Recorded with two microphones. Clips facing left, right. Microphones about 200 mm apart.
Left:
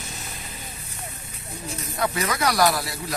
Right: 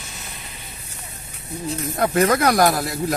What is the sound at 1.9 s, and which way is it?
Speech, 50° right (ahead or behind).